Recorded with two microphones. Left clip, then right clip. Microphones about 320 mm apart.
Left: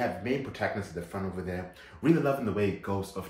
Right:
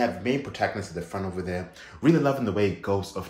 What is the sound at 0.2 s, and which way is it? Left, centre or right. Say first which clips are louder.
Speech: right 5 dB; right.